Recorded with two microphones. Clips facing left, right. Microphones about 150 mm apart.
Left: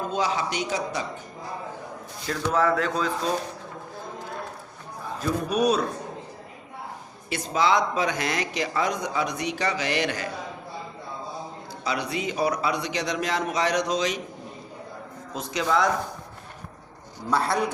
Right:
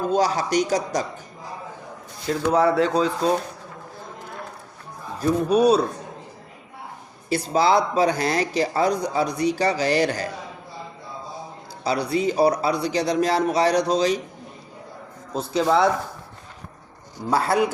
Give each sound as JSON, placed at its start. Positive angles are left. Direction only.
{"t": 0.1, "sound": "speech", "side_deg": -40}
{"t": 2.3, "sound": "speech", "side_deg": -35}
{"t": 5.2, "sound": "speech", "side_deg": -30}
{"t": 7.3, "sound": "speech", "side_deg": -35}
{"t": 11.8, "sound": "speech", "side_deg": -35}
{"t": 15.3, "sound": "speech", "side_deg": -35}